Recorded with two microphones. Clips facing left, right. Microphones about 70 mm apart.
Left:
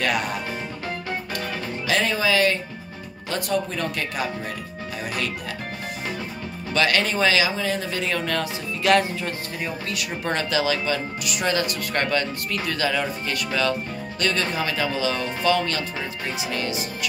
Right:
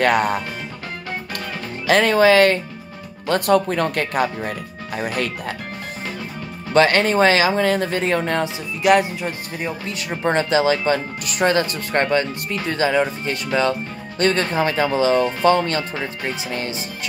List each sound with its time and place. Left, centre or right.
0.0 s speech: right
1.9 s speech: right
6.7 s speech: right